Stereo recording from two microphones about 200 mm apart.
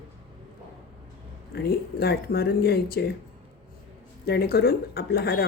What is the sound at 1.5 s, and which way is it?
Speech, 50° left (ahead or behind).